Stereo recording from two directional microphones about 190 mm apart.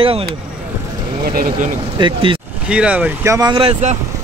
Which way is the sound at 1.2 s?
50° right (ahead or behind).